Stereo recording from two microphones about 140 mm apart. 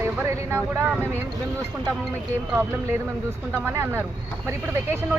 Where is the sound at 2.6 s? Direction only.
20° right (ahead or behind).